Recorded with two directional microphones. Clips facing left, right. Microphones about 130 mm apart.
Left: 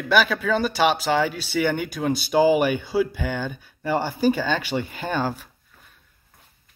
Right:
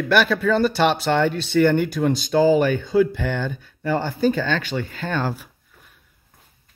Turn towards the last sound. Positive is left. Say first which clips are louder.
# even
turn(degrees=10)  # may be behind; listen again after turning